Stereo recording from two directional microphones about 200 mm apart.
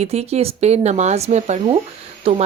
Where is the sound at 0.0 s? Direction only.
30° right (ahead or behind).